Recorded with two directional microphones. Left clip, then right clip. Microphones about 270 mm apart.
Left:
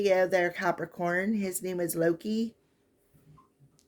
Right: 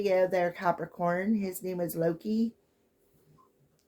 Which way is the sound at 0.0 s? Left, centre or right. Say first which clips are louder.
Left 1 dB; left.